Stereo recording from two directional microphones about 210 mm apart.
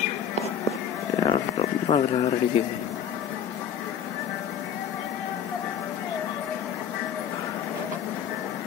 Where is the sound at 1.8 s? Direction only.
30° left (ahead or behind).